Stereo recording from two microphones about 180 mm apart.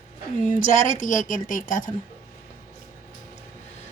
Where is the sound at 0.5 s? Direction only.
45° left (ahead or behind).